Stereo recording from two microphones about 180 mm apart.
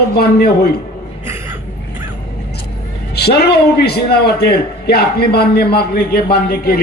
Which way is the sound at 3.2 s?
65° left (ahead or behind).